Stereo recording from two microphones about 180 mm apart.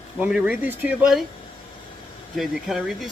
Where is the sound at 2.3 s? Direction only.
Centre (ahead or behind).